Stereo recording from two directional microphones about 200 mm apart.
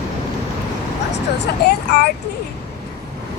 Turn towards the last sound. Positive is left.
turn(degrees=55)  # may be behind; listen again after turning